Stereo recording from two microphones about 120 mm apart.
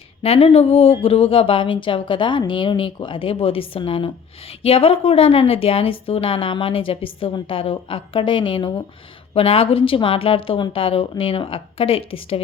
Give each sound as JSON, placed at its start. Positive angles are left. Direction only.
{"t": 0.2, "sound": "a woman's voice", "side_deg": 55}